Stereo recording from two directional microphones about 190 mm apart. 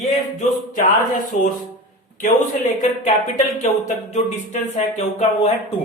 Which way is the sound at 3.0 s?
40° left (ahead or behind).